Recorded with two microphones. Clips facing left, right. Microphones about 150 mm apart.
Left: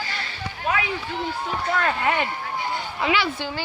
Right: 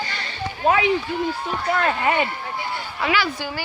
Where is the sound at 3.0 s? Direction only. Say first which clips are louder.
Right 1 dB; 25° left (ahead or behind).